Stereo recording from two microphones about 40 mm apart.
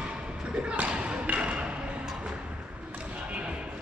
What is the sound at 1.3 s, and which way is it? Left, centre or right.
Music, right.